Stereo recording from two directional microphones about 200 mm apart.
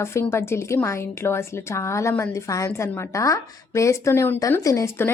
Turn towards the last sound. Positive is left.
turn(degrees=15)  # may be behind; listen again after turning